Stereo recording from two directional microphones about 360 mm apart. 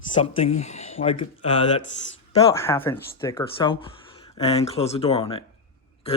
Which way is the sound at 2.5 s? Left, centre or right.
Centre.